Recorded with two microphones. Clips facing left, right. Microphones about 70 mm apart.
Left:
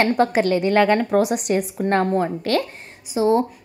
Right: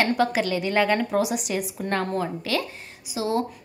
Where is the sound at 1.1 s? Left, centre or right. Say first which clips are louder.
Left 6 dB; left.